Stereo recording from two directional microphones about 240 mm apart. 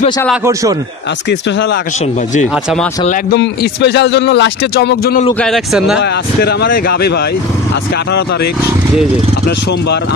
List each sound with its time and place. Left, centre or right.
3.1 s speech: left
5.4 s a man's voice: centre
5.9 s speech: left